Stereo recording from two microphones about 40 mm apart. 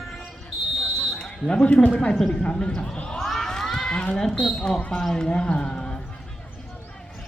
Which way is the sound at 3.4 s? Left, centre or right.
Centre.